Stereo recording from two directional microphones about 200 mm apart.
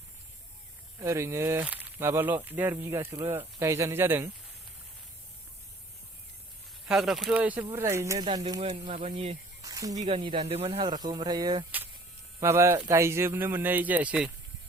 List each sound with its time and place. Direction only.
0.9 s speech: 15° right (ahead or behind)
6.8 s speech: 5° right (ahead or behind); by 8.4 s 20° right (ahead or behind)
8.6 s speech: 30° right (ahead or behind)
9.6 s snake: 15° right (ahead or behind)
9.9 s speech: 30° right (ahead or behind); by 14.3 s 5° right (ahead or behind)